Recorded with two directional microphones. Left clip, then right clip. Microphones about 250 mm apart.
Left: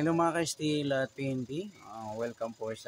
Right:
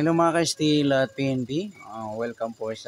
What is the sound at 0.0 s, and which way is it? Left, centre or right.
Speech, centre.